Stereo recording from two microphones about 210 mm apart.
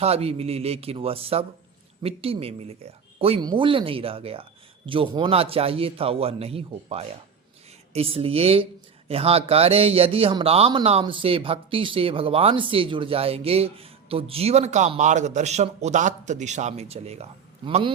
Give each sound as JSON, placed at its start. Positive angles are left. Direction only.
{"t": 0.0, "sound": "a man's voice", "side_deg": -30}